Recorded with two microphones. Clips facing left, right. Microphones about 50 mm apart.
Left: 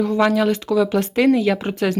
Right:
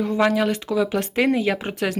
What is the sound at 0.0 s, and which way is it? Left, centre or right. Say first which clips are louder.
Speech: left 3 dB; centre.